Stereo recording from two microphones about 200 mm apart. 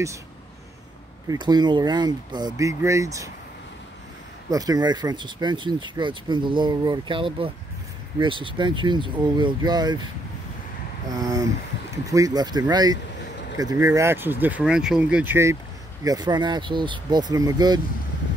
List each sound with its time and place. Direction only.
1.3 s speech: 20° right (ahead or behind)
4.5 s speech: 20° right (ahead or behind)
11.1 s speech: 15° right (ahead or behind)